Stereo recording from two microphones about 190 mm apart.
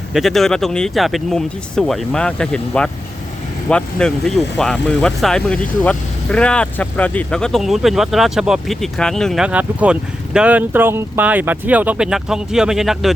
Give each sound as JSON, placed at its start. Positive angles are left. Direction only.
{"t": 0.1, "sound": "speech", "side_deg": 0}